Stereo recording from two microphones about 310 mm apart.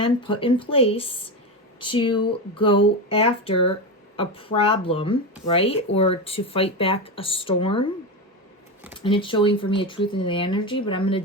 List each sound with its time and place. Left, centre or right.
0.0 s speech: centre
9.0 s speech: centre